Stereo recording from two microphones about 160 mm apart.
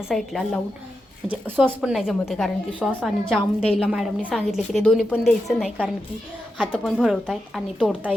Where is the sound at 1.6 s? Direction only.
5° right (ahead or behind).